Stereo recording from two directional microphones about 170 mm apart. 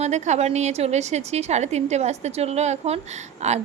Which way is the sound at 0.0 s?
40° right (ahead or behind).